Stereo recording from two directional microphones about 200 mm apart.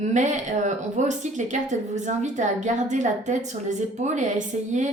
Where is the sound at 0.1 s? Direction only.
35° right (ahead or behind).